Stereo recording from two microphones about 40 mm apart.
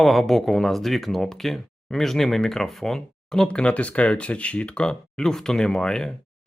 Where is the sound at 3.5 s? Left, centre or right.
Left.